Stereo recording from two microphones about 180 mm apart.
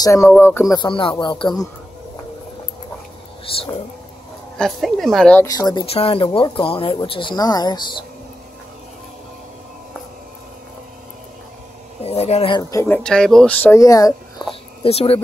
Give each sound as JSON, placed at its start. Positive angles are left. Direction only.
{"t": 0.0, "sound": "speech", "side_deg": 15}
{"t": 0.7, "sound": "speech", "side_deg": 25}
{"t": 3.4, "sound": "speech", "side_deg": 30}
{"t": 4.6, "sound": "speech", "side_deg": 0}
{"t": 5.5, "sound": "speech", "side_deg": 20}
{"t": 5.9, "sound": "speech", "side_deg": 30}
{"t": 12.0, "sound": "speech", "side_deg": 35}
{"t": 12.7, "sound": "speech", "side_deg": 10}
{"t": 14.5, "sound": "speech", "side_deg": 35}